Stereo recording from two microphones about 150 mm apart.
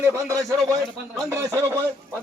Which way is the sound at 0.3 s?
20° right (ahead or behind).